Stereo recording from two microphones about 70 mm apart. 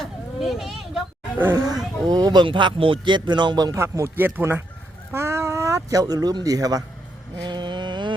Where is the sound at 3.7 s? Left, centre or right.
Right.